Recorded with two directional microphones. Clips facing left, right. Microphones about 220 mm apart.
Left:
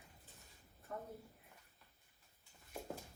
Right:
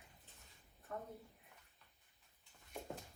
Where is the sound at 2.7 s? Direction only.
Centre (ahead or behind).